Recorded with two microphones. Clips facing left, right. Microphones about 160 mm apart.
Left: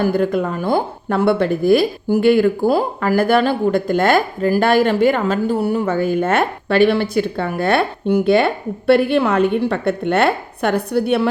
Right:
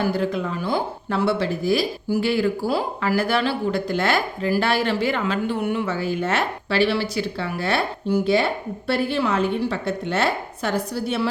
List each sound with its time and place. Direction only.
0.0 s speech: 50° left (ahead or behind)
5.8 s speech: 50° left (ahead or behind)